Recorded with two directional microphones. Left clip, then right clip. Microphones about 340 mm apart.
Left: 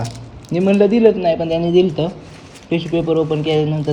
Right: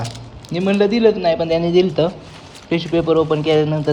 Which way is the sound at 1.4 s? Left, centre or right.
Right.